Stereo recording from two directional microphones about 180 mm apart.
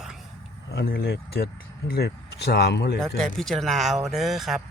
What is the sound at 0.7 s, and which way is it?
Speech, 60° left (ahead or behind).